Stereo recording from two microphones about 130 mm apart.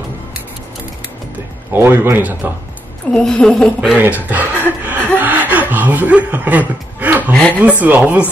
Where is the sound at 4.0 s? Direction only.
15° right (ahead or behind).